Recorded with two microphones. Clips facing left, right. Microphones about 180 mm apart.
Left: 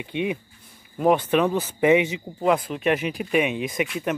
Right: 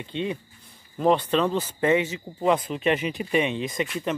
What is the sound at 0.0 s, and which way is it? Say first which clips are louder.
Speech: left 3 dB; 15° left (ahead or behind).